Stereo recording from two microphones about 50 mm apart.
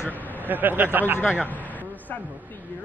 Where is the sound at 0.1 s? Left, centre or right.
Left.